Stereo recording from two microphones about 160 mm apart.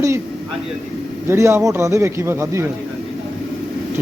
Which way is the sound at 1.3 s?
15° right (ahead or behind).